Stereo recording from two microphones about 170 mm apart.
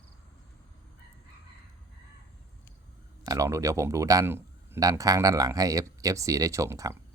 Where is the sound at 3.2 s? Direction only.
20° right (ahead or behind).